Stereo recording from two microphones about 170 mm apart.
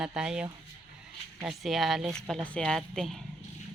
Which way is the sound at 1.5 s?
Centre (ahead or behind).